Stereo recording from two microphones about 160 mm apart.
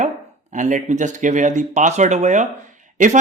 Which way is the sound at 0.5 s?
50° right (ahead or behind).